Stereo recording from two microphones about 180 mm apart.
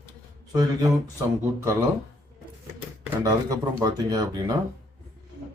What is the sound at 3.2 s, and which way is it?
Speech, 20° right (ahead or behind).